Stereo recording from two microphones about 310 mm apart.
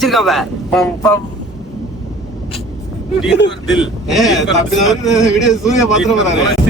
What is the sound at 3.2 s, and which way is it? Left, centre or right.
Speech, left.